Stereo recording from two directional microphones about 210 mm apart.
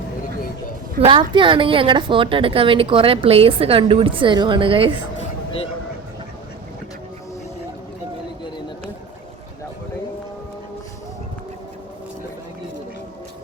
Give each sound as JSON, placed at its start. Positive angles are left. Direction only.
{"t": 1.0, "sound": "a woman's voice", "side_deg": -25}